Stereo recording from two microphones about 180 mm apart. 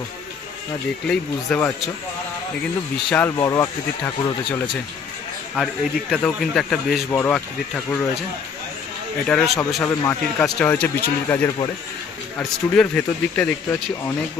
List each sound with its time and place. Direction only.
1.0 s speech: 5° left (ahead or behind)
3.1 s speech: 10° left (ahead or behind)
5.5 s speech: centre (ahead or behind)
9.2 s speech: 5° left (ahead or behind)
9.8 s speech: 15° left (ahead or behind)